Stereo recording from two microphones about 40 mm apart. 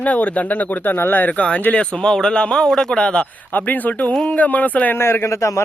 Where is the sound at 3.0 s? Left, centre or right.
Left.